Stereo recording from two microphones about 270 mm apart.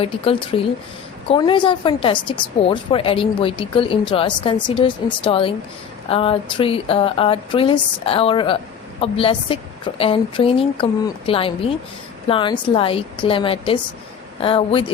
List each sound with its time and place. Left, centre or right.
0.0 s a woman's voice: left